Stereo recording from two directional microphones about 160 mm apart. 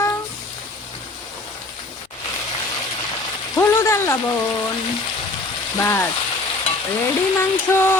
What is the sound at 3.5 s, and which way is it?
Frying, 15° left (ahead or behind).